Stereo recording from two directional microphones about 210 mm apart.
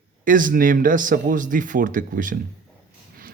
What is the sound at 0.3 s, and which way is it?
A man's voice, 40° right (ahead or behind).